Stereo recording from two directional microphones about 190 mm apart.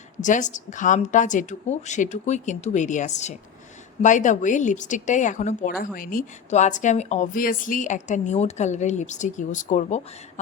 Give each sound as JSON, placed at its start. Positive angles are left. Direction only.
{"t": 0.2, "sound": "speech", "side_deg": 40}